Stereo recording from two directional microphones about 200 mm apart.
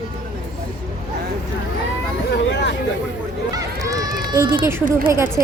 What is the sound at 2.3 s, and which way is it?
Speech, 60° left (ahead or behind).